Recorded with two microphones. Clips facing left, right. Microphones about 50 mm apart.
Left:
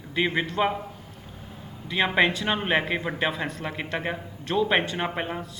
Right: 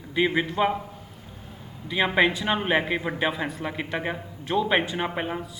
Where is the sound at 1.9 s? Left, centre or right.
Centre.